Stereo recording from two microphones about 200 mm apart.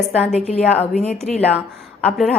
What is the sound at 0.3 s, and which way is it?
Speech, 30° left (ahead or behind).